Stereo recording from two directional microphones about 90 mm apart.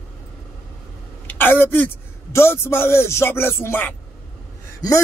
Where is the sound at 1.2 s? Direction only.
25° left (ahead or behind).